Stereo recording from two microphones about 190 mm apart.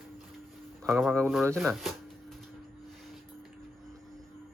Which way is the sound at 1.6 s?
Centre (ahead or behind).